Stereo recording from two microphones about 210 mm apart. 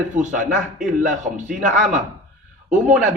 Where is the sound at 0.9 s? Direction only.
35° right (ahead or behind).